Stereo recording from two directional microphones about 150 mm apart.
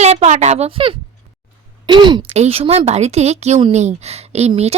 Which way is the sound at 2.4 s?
40° right (ahead or behind).